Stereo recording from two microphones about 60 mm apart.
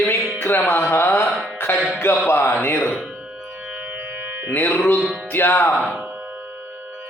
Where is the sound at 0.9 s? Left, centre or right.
Left.